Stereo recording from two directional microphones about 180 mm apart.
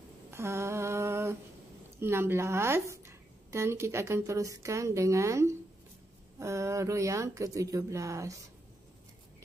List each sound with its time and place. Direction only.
0.3 s humming: 15° right (ahead or behind)
2.0 s a woman's voice: 15° right (ahead or behind)